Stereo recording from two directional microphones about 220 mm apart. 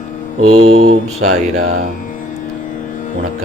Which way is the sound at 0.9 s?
75° right (ahead or behind).